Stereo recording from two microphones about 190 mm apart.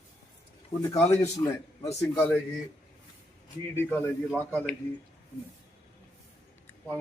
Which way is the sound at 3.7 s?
10° left (ahead or behind).